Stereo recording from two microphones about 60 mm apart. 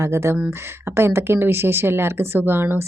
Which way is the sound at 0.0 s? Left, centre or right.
Right.